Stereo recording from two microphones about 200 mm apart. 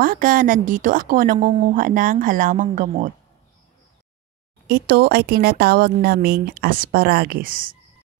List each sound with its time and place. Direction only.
0.0 s a woman's voice: 45° right (ahead or behind)
4.6 s a woman's voice: 50° right (ahead or behind)